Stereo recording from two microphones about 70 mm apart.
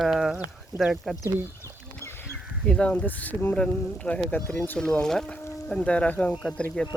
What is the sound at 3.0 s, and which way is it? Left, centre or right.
Speech, left.